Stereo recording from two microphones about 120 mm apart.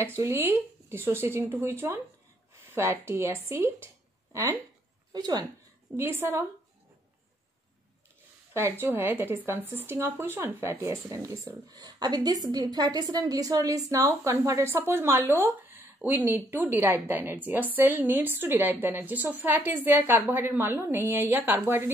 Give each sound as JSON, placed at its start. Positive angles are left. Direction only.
{"t": 0.2, "sound": "speech", "side_deg": -20}
{"t": 5.9, "sound": "speech", "side_deg": -20}
{"t": 8.5, "sound": "a woman's voice", "side_deg": -20}